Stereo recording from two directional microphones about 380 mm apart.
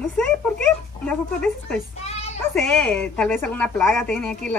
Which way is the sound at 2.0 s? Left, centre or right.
Centre.